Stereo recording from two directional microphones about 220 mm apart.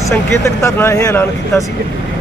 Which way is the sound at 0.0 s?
15° left (ahead or behind).